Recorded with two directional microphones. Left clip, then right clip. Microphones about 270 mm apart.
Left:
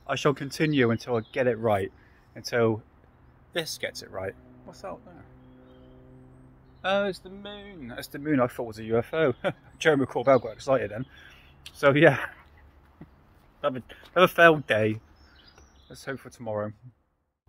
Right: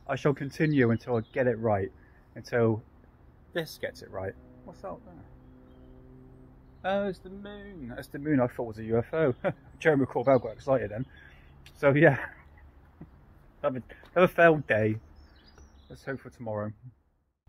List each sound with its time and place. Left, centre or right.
0.0 s speech: centre
3.5 s speech: centre
4.1 s speech: centre
6.9 s speech: centre
13.6 s a man's voice: centre
16.0 s speech: centre